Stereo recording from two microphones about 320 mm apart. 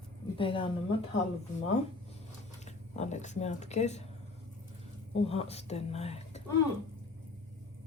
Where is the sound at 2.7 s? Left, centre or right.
Left.